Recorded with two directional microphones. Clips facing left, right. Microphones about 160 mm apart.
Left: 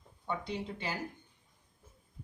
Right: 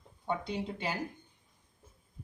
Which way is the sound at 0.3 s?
25° right (ahead or behind).